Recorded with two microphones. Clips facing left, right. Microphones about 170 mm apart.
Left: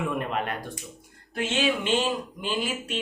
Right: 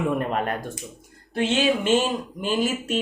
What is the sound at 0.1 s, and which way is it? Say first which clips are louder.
Speech: right 4 dB; 45° right (ahead or behind).